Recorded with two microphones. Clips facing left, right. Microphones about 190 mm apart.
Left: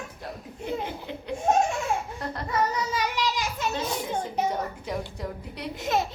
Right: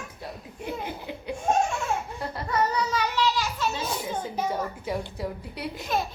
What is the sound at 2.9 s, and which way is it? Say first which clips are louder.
Children playing: right 2 dB; 10° left (ahead or behind).